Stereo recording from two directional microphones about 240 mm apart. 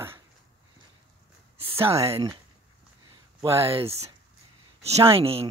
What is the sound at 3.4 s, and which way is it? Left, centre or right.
Speech, right.